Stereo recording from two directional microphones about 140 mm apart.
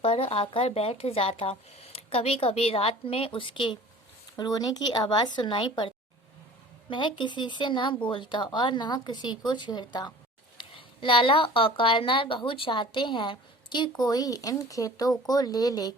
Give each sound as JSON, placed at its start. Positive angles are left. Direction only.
{"t": 0.0, "sound": "a woman's voice", "side_deg": 45}